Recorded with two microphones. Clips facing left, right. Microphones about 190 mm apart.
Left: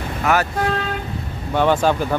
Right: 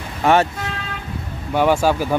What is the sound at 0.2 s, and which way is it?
Speech, 30° right (ahead or behind).